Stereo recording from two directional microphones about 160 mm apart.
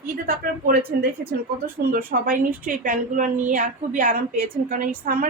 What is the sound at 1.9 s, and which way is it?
A woman's voice, 65° right (ahead or behind).